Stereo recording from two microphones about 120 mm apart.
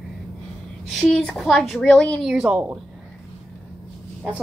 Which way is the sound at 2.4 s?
10° right (ahead or behind).